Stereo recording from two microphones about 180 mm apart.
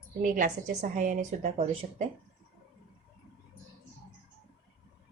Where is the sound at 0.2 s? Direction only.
45° right (ahead or behind).